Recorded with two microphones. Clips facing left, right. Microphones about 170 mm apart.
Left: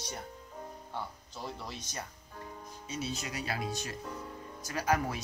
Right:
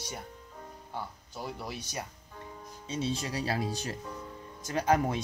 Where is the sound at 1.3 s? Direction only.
10° right (ahead or behind).